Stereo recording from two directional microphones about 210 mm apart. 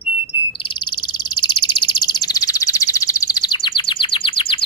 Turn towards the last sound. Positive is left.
turn(degrees=25)  # may be behind; listen again after turning